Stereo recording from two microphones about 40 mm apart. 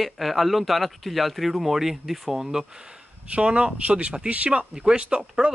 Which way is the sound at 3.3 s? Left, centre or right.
Right.